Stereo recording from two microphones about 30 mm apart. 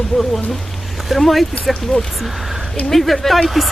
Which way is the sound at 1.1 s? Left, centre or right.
Centre.